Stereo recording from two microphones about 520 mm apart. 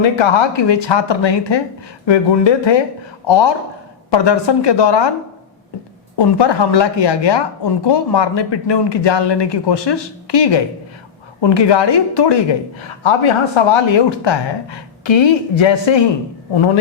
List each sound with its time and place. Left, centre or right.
0.0 s speech: left
6.1 s speech: left
13.0 s speech: left